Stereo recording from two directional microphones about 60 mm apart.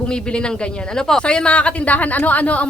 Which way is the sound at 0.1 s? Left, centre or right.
Centre.